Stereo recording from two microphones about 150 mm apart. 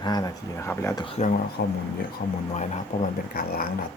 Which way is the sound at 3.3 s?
75° left (ahead or behind).